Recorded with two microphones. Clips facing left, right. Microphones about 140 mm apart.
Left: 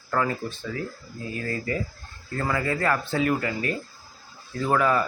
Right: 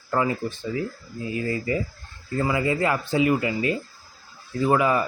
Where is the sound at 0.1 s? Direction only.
15° right (ahead or behind).